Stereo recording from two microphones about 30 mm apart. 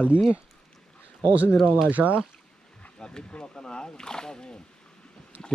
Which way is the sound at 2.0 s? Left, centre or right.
Centre.